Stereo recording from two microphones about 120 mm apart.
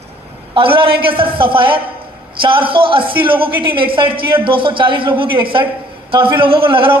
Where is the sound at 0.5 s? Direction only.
45° right (ahead or behind).